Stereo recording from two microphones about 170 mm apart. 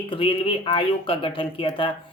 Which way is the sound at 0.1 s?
30° left (ahead or behind).